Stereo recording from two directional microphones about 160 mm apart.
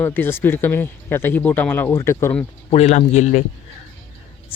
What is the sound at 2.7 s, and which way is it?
Speech, 45° left (ahead or behind).